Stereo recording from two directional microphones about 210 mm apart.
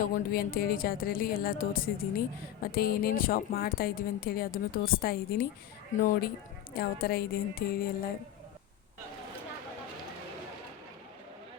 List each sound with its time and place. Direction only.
0.0 s a woman's voice: 45° left (ahead or behind)